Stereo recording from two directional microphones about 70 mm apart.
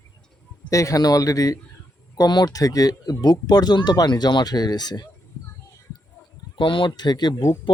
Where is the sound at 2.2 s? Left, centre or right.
Left.